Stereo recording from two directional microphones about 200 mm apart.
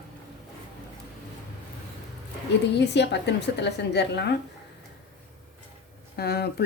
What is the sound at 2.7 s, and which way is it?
Speech, 60° left (ahead or behind).